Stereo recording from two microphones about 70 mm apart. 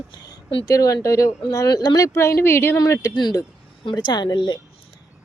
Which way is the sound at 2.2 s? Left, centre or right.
Left.